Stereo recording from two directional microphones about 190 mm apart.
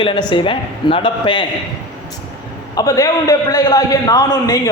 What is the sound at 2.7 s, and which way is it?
Speech, 15° left (ahead or behind).